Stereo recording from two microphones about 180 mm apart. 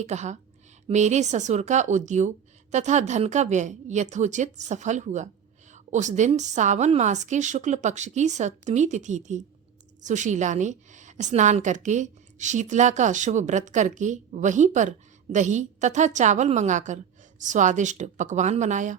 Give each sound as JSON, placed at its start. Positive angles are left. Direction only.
{"t": 0.0, "sound": "a woman's voice", "side_deg": -40}